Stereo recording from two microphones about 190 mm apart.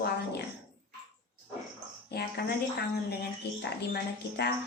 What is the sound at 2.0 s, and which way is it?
Speech, 60° left (ahead or behind).